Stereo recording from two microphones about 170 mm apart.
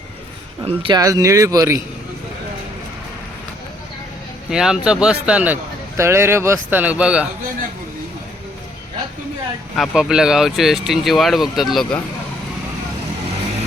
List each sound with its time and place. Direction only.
0.6 s speech: 30° right (ahead or behind)
1.0 s speech: 20° right (ahead or behind)
4.4 s speech: 5° right (ahead or behind)
9.7 s speech: centre (ahead or behind)